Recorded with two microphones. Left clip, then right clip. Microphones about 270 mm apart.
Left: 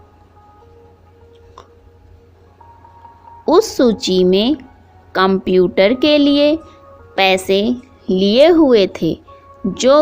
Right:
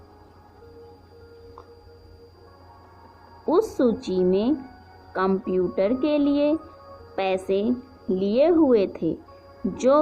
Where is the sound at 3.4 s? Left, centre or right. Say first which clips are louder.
Left 9 dB; left.